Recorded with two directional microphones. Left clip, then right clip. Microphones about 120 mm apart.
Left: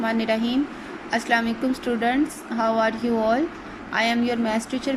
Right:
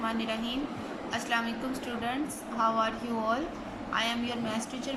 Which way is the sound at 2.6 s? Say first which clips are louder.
Left 6 dB; 35° left (ahead or behind).